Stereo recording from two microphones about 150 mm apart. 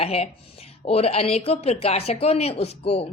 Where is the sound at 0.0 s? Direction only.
40° left (ahead or behind).